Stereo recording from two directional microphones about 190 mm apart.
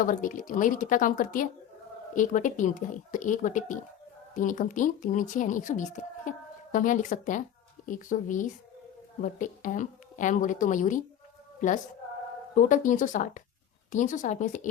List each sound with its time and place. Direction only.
0.0 s speech: 45° left (ahead or behind)
12.5 s a woman's voice: 45° left (ahead or behind)